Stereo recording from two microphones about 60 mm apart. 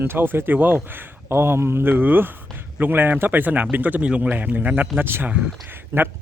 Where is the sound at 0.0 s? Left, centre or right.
Right.